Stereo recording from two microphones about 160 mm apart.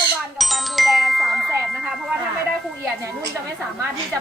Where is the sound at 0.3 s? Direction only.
Centre (ahead or behind).